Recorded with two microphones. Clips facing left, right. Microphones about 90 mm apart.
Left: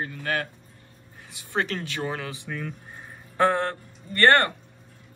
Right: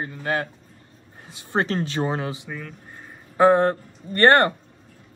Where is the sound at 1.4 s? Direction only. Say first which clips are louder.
Right 4 dB; 25° right (ahead or behind).